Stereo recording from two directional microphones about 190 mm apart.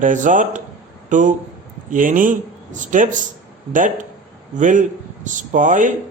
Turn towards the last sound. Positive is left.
turn(degrees=-45)  # may be behind; listen again after turning